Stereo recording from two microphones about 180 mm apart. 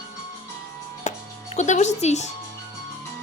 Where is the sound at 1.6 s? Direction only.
40° left (ahead or behind).